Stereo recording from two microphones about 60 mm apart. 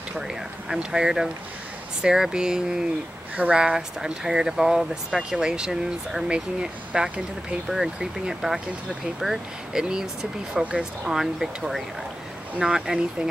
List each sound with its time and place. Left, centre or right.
0.7 s speech: centre
7.6 s speech: centre
11.1 s speech: centre